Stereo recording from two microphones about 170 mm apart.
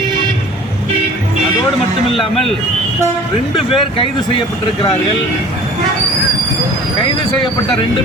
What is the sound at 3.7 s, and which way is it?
Speech, 30° left (ahead or behind).